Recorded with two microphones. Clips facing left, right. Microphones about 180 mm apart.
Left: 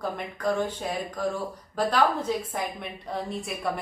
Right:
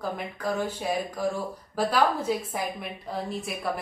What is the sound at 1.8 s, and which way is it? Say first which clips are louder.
A woman's voice: even; 10° right (ahead or behind).